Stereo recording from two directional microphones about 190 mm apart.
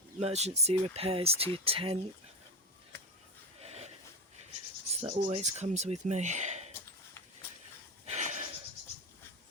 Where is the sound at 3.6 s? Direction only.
35° right (ahead or behind).